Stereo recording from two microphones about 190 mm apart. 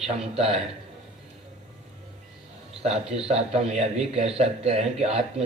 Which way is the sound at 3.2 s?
35° right (ahead or behind).